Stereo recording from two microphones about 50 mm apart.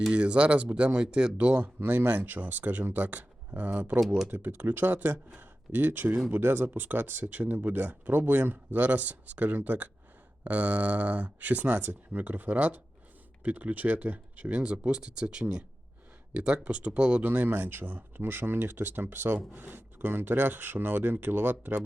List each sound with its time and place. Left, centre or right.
0.1 s speech: right
1.8 s speech: right
4.0 s speech: centre
4.3 s speech: right
5.4 s speech: right
17.2 s speech: right